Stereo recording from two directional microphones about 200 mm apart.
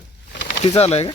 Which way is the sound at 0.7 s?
30° left (ahead or behind).